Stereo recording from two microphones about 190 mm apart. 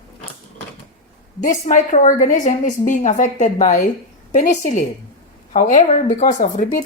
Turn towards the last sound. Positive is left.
turn(degrees=40)  # may be behind; listen again after turning